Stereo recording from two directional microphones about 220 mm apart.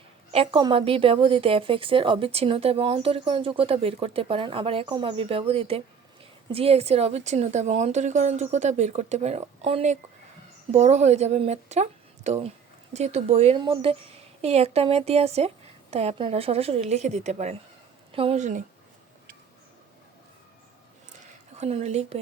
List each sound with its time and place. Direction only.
0.3 s a woman's voice: 25° right (ahead or behind)
21.6 s speech: 30° right (ahead or behind)